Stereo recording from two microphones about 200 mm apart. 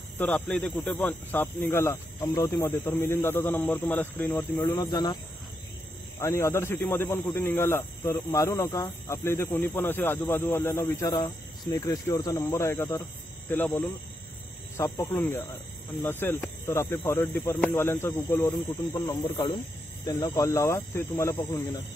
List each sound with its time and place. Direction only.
0.2 s speech: 5° left (ahead or behind)